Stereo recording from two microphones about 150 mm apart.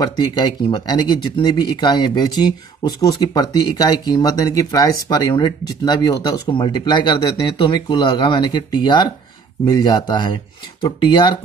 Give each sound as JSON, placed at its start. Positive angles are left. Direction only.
{"t": 0.0, "sound": "speech", "side_deg": 25}